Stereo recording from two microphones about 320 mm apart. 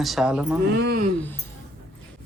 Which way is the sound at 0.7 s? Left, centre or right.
Right.